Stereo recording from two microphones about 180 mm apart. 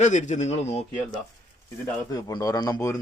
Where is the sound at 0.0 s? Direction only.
40° left (ahead or behind).